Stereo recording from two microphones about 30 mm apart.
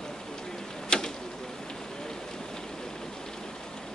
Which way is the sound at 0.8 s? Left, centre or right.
Centre.